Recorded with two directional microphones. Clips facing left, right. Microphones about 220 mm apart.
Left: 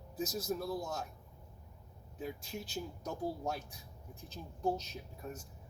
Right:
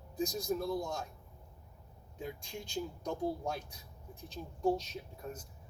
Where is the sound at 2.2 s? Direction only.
5° left (ahead or behind).